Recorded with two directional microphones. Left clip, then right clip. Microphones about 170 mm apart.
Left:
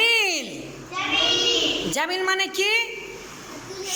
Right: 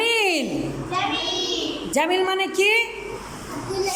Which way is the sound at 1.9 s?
15° right (ahead or behind).